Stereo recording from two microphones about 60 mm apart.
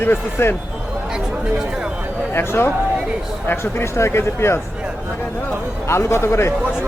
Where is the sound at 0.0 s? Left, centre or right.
Left.